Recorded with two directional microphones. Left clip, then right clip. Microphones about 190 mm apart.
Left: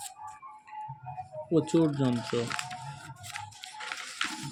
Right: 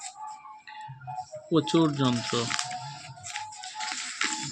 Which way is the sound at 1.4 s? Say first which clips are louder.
Right 2 dB; centre (ahead or behind).